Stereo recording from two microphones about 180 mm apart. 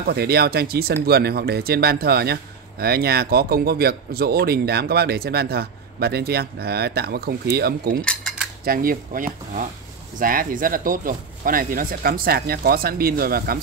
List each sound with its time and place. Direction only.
0.0 s speech: 60° right (ahead or behind)
8.0 s cutlery: 5° left (ahead or behind)
8.6 s speech: 50° right (ahead or behind)